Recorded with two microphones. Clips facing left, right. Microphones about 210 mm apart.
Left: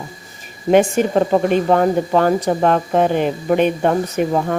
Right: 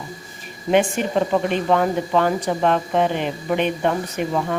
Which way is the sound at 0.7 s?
45° left (ahead or behind).